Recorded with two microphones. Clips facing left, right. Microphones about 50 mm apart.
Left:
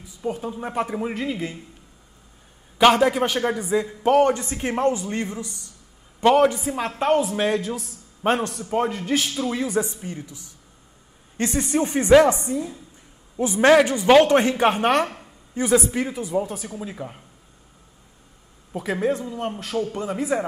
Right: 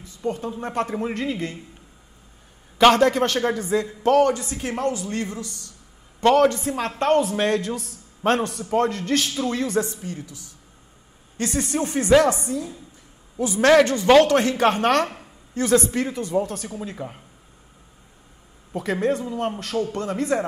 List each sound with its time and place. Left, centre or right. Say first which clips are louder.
0.0 s a man's voice: right 1 dB; centre
2.8 s a man's voice: right 1 dB; centre
4.3 s a woman's voice: left 1 dB; left
6.2 s a man's voice: even; centre
10.0 s a woman's voice: even; left
13.7 s a man's voice: even; centre
18.7 s a man's voice: right 1 dB; centre